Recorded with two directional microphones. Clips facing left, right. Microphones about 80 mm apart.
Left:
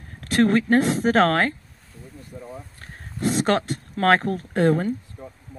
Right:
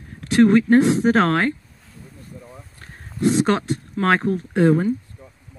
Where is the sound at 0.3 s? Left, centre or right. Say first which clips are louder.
Right 4 dB; centre.